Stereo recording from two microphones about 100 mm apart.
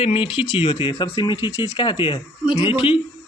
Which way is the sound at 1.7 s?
55° left (ahead or behind).